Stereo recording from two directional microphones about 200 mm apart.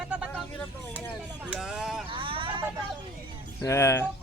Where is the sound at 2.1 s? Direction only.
25° right (ahead or behind).